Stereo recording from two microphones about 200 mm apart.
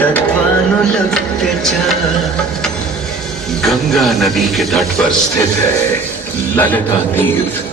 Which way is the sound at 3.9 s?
Centre (ahead or behind).